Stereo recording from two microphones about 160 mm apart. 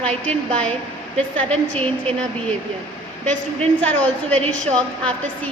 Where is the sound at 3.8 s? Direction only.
10° left (ahead or behind).